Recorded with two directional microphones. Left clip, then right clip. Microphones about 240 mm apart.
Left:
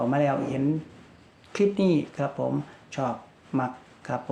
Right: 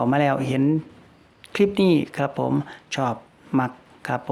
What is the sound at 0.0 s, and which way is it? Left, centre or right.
Speech, right.